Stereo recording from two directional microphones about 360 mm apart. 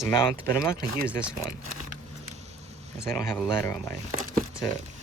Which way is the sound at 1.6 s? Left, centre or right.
Right.